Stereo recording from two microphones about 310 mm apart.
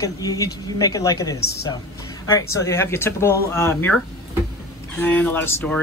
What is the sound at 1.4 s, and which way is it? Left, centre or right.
Speech, left.